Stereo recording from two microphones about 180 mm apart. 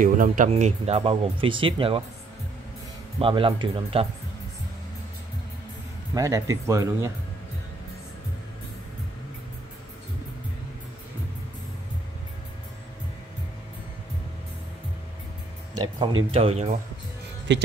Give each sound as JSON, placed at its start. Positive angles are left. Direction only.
{"t": 0.0, "sound": "speech", "side_deg": -50}
{"t": 3.2, "sound": "speech", "side_deg": -30}
{"t": 6.1, "sound": "speech", "side_deg": -20}
{"t": 16.3, "sound": "speech", "side_deg": -35}
{"t": 17.5, "sound": "speech", "side_deg": -75}